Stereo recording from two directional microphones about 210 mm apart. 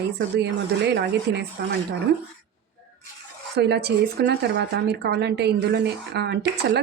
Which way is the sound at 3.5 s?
50° right (ahead or behind).